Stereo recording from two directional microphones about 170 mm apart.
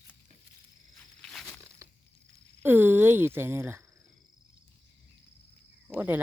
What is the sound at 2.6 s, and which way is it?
Speech, 10° right (ahead or behind).